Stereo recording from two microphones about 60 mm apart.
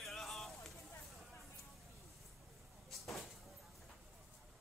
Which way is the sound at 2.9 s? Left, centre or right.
Centre.